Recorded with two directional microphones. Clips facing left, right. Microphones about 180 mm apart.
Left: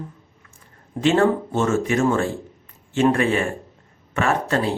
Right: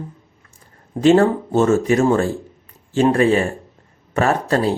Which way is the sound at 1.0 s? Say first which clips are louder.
Right 4 dB; 40° right (ahead or behind).